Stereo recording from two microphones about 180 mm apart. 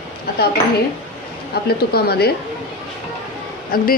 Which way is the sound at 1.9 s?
60° left (ahead or behind).